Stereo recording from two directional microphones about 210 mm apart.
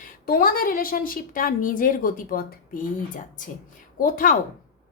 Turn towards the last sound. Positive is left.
turn(degrees=40)  # may be behind; listen again after turning